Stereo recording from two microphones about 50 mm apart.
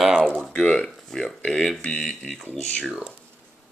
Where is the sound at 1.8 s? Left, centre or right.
Left.